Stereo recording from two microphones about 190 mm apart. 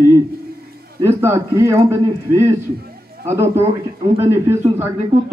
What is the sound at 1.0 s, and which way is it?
Speech, 15° right (ahead or behind).